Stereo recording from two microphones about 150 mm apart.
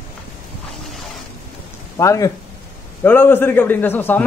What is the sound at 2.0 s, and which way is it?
A man's voice, 20° left (ahead or behind).